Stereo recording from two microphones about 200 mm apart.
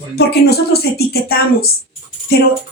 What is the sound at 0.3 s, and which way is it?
Speech, 50° left (ahead or behind).